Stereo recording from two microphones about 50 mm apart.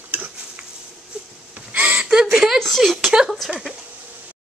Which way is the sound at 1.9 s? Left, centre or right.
Centre.